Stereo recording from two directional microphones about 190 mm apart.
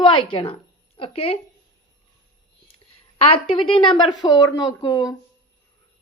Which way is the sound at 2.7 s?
30° left (ahead or behind).